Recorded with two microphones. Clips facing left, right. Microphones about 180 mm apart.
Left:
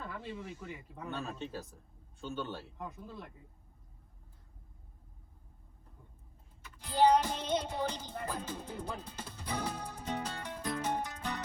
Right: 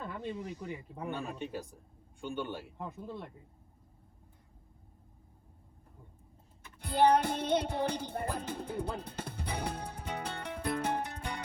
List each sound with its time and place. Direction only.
0.0 s snake: 25° right (ahead or behind)
0.3 s speech: 40° right (ahead or behind)
1.0 s a man's voice: 15° right (ahead or behind)
6.7 s music: 60° right (ahead or behind)